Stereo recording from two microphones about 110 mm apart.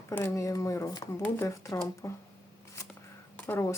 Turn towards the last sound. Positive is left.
turn(degrees=20)  # may be behind; listen again after turning